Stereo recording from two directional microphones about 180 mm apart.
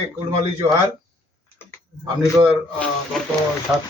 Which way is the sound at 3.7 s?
5° right (ahead or behind).